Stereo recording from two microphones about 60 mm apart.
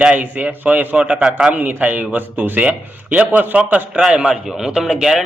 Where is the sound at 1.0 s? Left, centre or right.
Centre.